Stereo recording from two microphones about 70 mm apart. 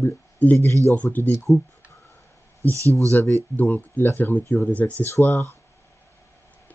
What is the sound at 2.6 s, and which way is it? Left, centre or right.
Speech, right.